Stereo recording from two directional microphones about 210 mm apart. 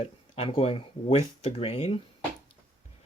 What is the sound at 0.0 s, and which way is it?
Speech, 25° left (ahead or behind).